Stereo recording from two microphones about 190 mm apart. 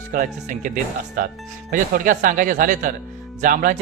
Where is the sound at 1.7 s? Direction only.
45° right (ahead or behind).